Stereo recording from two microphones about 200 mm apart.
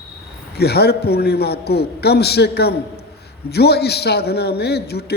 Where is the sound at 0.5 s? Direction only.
55° left (ahead or behind).